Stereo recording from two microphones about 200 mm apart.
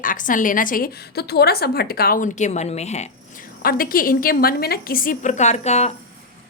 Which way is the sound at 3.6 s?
45° left (ahead or behind).